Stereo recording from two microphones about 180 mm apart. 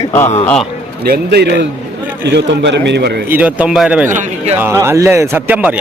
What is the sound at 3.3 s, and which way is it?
A man's voice, 10° right (ahead or behind).